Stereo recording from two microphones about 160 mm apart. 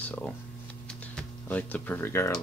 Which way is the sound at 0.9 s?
5° left (ahead or behind).